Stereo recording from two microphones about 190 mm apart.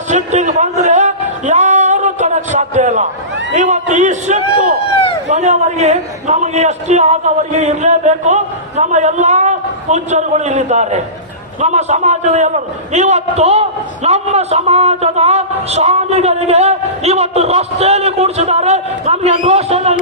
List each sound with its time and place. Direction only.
0.1 s music: 40° right (ahead or behind)
3.5 s a sound: 40° right (ahead or behind)
5.3 s a man's voice: 35° right (ahead or behind)